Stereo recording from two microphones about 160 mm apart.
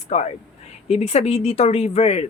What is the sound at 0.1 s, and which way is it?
A woman's voice, 40° left (ahead or behind).